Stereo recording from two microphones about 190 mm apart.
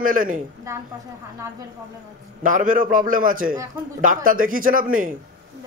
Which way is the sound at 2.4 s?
45° right (ahead or behind).